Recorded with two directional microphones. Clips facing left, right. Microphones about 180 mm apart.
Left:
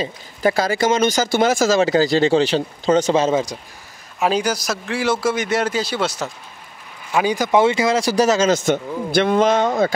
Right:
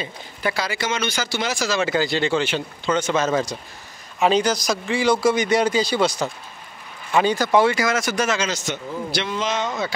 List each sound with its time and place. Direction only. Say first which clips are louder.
0.0 s speech: left 7 dB; 40° left (ahead or behind)
4.2 s a man's voice: right 1 dB; 10° left (ahead or behind); by 9.9 s 55° left (ahead or behind)